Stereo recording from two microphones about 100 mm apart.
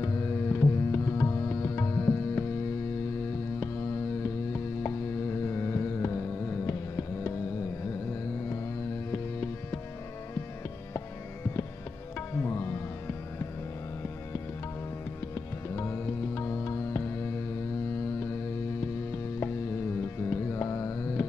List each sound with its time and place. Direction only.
0.0 s tabla: 25° left (ahead or behind)
5.5 s music: 25° left (ahead or behind)
12.4 s music: 25° left (ahead or behind)
15.3 s music: 25° left (ahead or behind)
20.2 s mantra: 25° left (ahead or behind)